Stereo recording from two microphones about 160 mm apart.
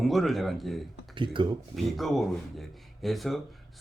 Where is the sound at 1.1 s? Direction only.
30° right (ahead or behind).